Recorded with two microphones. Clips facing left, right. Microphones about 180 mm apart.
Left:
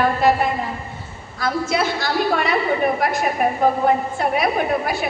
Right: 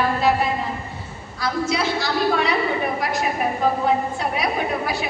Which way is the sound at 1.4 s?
50° left (ahead or behind).